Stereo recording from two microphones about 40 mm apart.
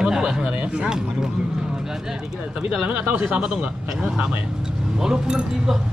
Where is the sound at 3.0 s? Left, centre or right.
Right.